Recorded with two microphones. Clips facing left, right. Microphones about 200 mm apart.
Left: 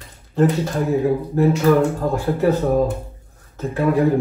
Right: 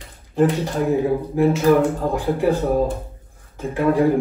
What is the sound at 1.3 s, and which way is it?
Speech, 15° right (ahead or behind).